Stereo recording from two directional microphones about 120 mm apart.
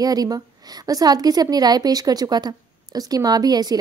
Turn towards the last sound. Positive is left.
turn(degrees=-35)  # may be behind; listen again after turning